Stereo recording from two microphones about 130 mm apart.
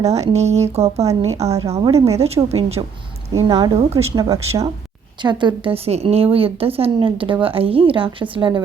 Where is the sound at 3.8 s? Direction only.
50° right (ahead or behind).